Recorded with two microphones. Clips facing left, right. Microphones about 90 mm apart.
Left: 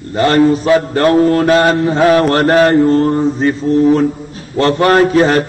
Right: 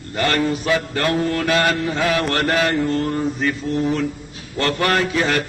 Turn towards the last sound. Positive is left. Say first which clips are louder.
# left 10 dB
turn(degrees=35)  # may be behind; listen again after turning